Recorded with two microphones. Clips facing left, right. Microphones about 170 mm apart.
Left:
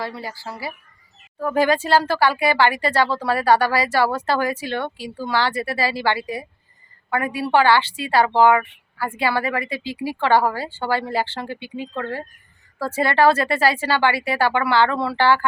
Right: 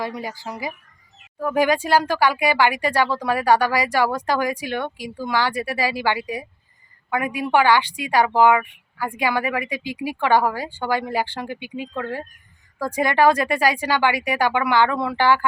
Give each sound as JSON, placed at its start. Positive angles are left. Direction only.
{"t": 0.0, "sound": "speech", "side_deg": -15}